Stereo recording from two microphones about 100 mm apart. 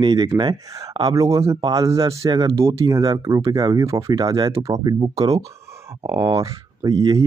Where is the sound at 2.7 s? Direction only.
40° right (ahead or behind).